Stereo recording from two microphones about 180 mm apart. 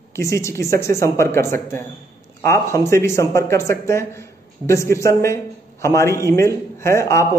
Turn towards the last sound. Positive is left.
turn(degrees=15)  # may be behind; listen again after turning